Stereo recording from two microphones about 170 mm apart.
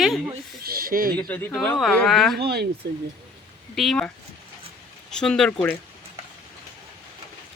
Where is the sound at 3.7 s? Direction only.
Centre (ahead or behind).